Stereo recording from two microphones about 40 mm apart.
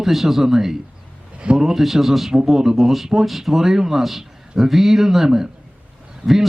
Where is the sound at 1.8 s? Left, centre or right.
Centre.